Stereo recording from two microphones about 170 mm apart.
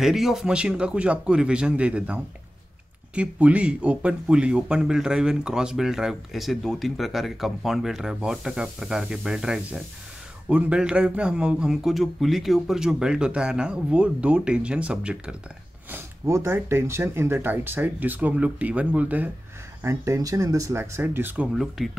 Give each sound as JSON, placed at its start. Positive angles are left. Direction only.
{"t": 0.0, "sound": "speech", "side_deg": 0}
{"t": 21.5, "sound": "speech", "side_deg": 0}